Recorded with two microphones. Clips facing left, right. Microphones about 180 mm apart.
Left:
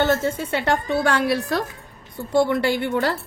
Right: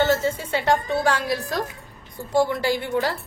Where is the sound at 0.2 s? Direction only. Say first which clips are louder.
Left 1 dB; 60° left (ahead or behind).